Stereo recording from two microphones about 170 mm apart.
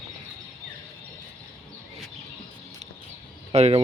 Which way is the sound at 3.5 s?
35° right (ahead or behind).